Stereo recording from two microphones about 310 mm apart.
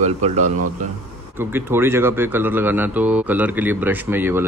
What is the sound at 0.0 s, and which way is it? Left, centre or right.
Speech, right.